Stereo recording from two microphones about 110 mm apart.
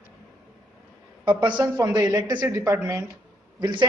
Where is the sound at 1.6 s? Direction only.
35° right (ahead or behind).